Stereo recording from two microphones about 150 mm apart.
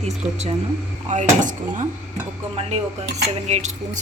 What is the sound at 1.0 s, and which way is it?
Speech, 55° right (ahead or behind).